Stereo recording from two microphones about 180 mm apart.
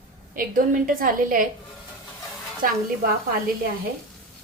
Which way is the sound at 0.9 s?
50° right (ahead or behind).